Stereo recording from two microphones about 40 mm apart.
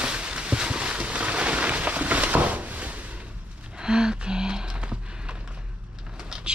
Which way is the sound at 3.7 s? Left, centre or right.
Centre.